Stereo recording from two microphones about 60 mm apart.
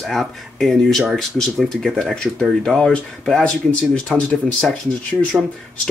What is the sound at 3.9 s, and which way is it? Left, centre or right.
Speech, centre.